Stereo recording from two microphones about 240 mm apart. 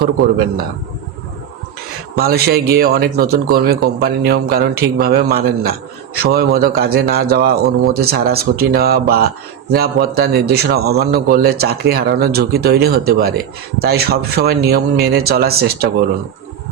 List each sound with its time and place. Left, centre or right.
0.0 s speech: right
2.1 s speech: right